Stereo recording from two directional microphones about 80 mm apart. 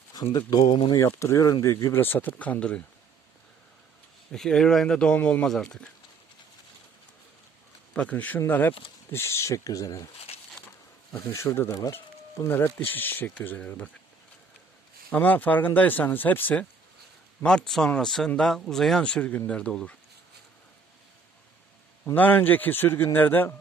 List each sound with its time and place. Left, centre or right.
0.1 s speech: left
0.9 s speech: left; by 2.8 s centre
4.3 s speech: centre
7.9 s speech: centre
9.1 s speech: left
11.3 s speech: left
11.7 s speech: left
12.5 s speech: left
15.1 s speech: centre
17.4 s speech: centre
22.0 s speech: left